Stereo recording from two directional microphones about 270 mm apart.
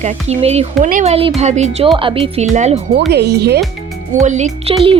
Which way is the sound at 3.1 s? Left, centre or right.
Right.